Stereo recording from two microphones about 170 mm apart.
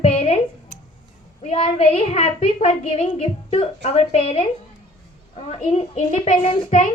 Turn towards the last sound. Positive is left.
turn(degrees=40)  # may be behind; listen again after turning